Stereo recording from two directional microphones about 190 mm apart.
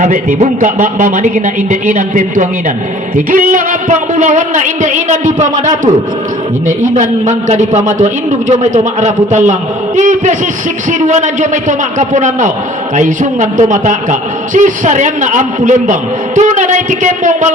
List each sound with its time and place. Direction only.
0.0 s a man's voice: 40° right (ahead or behind)
6.7 s a man's voice: 45° right (ahead or behind)